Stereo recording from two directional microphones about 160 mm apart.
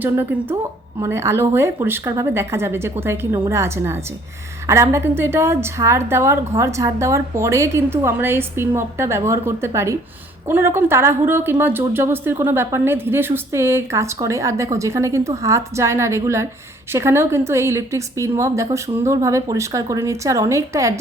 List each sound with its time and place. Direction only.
0.0 s a woman's voice: 10° right (ahead or behind)